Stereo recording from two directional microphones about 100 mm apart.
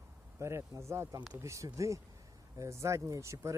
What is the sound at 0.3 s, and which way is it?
Speech, 30° right (ahead or behind).